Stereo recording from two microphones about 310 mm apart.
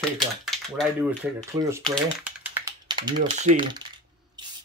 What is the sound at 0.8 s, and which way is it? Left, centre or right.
Speech, centre.